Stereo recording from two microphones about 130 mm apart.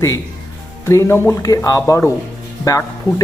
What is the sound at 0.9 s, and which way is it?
Speech, 20° left (ahead or behind).